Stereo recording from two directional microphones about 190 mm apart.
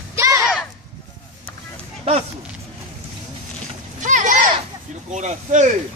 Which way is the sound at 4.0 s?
40° right (ahead or behind).